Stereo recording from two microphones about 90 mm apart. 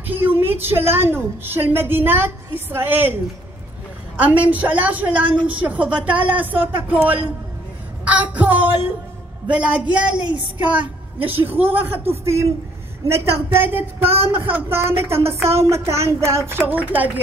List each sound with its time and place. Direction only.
0.1 s a woman's voice: 25° right (ahead or behind)
4.2 s speech: 15° right (ahead or behind)
10.2 s speech: 60° right (ahead or behind)
10.7 s a woman's voice: 20° right (ahead or behind)
14.0 s speech: 90° right
14.3 s a woman's voice: 20° right (ahead or behind)